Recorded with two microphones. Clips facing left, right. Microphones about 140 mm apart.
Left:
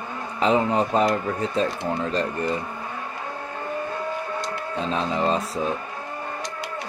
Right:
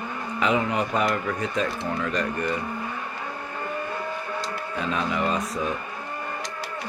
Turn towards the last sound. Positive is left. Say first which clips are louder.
# left 2 dB
turn(degrees=30)  # may be behind; listen again after turning